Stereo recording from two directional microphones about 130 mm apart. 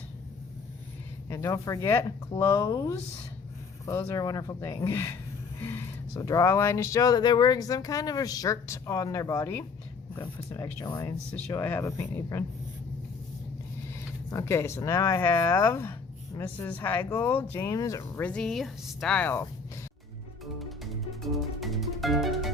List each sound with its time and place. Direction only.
1.3 s speech: 25° left (ahead or behind)
6.1 s speech: 25° left (ahead or behind)
11.3 s speech: 15° left (ahead or behind)
14.3 s speech: 20° left (ahead or behind)
18.2 s a woman's voice: 10° left (ahead or behind)
20.4 s music: centre (ahead or behind)